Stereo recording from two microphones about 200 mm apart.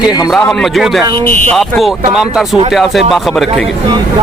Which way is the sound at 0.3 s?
Centre (ahead or behind).